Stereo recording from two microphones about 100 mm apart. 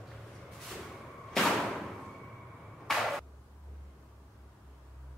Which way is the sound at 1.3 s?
Centre (ahead or behind).